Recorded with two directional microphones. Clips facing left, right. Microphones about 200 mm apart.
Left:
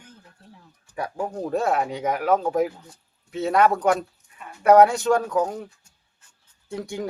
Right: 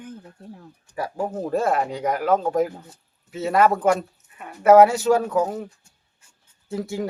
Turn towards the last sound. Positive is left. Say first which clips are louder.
# right 3 dB
turn(degrees=0)  # may be behind; listen again after turning